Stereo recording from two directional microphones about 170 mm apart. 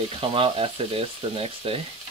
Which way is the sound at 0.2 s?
30° right (ahead or behind).